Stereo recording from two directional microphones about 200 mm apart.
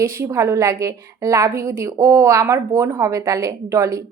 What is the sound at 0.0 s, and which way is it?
A woman's voice, 15° right (ahead or behind).